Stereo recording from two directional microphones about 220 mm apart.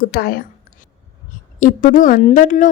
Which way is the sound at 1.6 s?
40° left (ahead or behind).